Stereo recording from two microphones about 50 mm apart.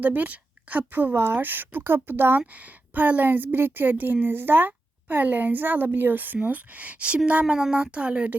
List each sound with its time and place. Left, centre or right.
0.0 s a woman's voice: right
1.1 s speech: right
1.4 s speech: right
2.5 s a woman's voice: right